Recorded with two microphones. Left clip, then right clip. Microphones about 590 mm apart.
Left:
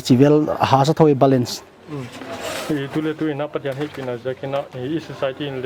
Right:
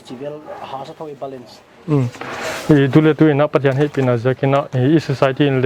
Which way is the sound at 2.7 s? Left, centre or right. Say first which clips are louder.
Right 14 dB; right.